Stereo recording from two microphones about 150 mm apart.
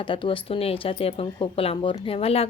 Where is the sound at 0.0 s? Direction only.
35° left (ahead or behind).